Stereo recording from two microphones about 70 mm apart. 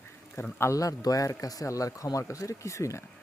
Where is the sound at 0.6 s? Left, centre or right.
Left.